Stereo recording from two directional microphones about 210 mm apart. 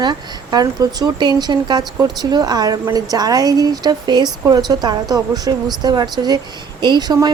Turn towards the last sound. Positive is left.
turn(degrees=-20)  # may be behind; listen again after turning